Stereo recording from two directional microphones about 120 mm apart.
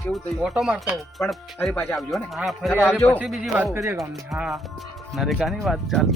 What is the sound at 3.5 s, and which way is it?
Speech, 20° right (ahead or behind).